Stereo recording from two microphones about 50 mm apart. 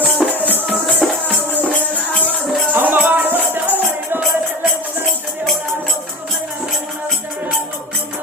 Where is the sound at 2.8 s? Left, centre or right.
Right.